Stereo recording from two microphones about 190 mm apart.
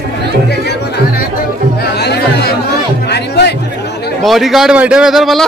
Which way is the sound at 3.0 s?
60° left (ahead or behind).